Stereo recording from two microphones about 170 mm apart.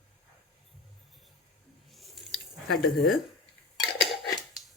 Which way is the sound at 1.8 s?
Centre (ahead or behind).